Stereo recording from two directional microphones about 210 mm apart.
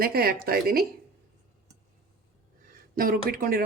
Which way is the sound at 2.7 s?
45° right (ahead or behind).